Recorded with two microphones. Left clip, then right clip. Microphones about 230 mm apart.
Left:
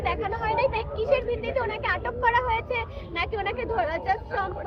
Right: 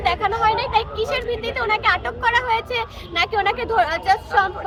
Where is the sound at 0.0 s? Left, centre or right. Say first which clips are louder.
Right 9 dB; centre.